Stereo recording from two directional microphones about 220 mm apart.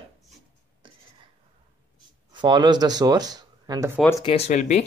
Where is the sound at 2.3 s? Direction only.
20° right (ahead or behind).